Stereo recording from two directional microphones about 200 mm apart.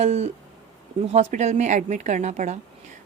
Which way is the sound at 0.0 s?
35° right (ahead or behind).